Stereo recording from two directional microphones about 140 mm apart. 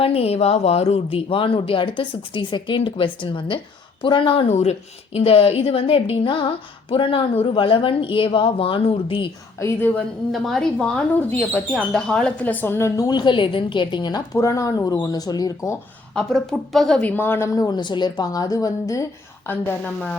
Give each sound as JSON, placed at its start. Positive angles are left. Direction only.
{"t": 0.0, "sound": "a woman's voice", "side_deg": 45}
{"t": 9.6, "sound": "a woman's voice", "side_deg": 20}
{"t": 9.9, "sound": "speech", "side_deg": 0}
{"t": 13.1, "sound": "speech", "side_deg": 35}
{"t": 14.3, "sound": "a woman's voice", "side_deg": 20}
{"t": 16.1, "sound": "a woman's voice", "side_deg": 5}
{"t": 19.5, "sound": "speech", "side_deg": 10}